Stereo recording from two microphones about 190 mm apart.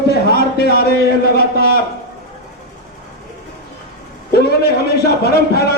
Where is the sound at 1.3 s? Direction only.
55° left (ahead or behind).